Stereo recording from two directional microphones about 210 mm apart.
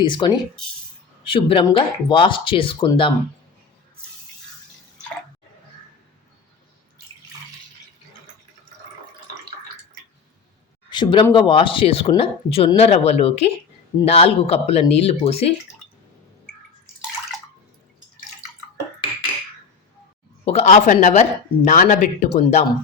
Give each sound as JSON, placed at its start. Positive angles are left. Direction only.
{"t": 0.0, "sound": "speech", "side_deg": 20}
{"t": 10.8, "sound": "speech", "side_deg": 20}
{"t": 20.4, "sound": "speech", "side_deg": 30}